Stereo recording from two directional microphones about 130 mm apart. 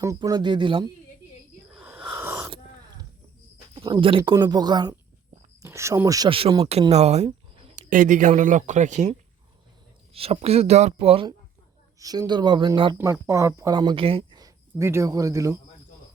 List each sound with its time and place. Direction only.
0.2 s speech: 35° right (ahead or behind)
2.0 s wheeze: 20° right (ahead or behind)
3.8 s speech: 40° right (ahead or behind)
6.2 s speech: 45° right (ahead or behind)
6.9 s speech: 55° right (ahead or behind)
7.8 s speech: 80° right; by 9.1 s 65° right (ahead or behind)
10.1 s speech: 50° right (ahead or behind)
11.9 s speech: 25° right (ahead or behind)
13.2 s speech: 20° right (ahead or behind); by 14.3 s 45° right (ahead or behind)
14.3 s speech: 25° right (ahead or behind)